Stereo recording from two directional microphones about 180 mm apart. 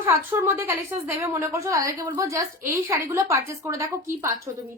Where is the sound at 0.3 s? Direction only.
10° right (ahead or behind).